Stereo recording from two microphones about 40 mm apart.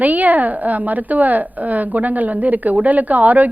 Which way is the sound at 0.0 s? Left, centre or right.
Right.